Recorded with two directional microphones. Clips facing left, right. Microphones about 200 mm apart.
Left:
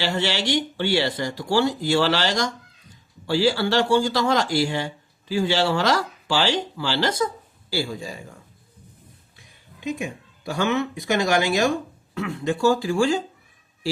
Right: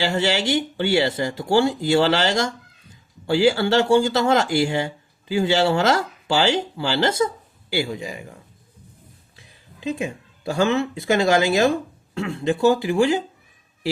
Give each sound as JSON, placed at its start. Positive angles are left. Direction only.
{"t": 0.0, "sound": "speech", "side_deg": -25}
{"t": 9.8, "sound": "a sound", "side_deg": -25}
{"t": 10.6, "sound": "speech", "side_deg": -30}